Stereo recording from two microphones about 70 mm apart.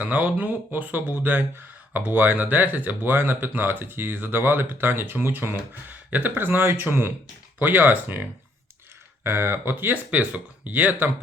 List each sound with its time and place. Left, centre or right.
0.0 s speech: right